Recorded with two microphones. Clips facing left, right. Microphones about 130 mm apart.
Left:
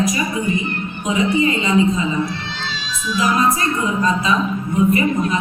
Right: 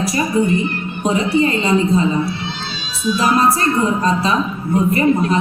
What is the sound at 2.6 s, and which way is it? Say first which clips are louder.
Children shouting: left 1 dB; 90° left.